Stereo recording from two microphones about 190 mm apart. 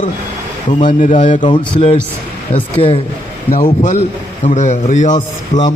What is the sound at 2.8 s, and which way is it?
A man's voice, 30° left (ahead or behind).